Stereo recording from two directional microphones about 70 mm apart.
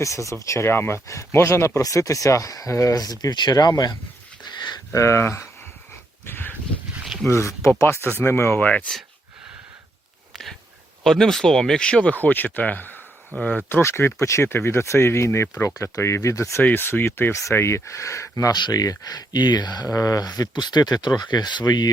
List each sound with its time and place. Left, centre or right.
0.0 s speech: left
4.4 s a sound: left
4.9 s speech: left
6.2 s dog: left
7.0 s a sound: centre
7.3 s speech: left
7.9 s speech: right
8.2 s speech: left
11.0 s speech: centre; by 13.0 s left
13.3 s speech: right
13.7 s speech: left
16.6 s speech: left
18.5 s speech: left